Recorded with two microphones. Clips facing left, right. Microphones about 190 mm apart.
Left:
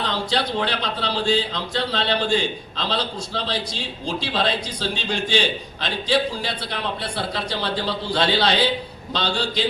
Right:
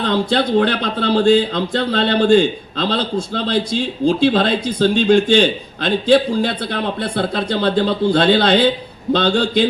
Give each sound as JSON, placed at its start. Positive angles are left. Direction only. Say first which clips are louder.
{"t": 0.0, "sound": "speech", "louder": "right 7 dB", "side_deg": -55}